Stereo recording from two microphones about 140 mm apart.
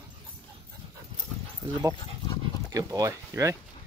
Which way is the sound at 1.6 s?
20° right (ahead or behind).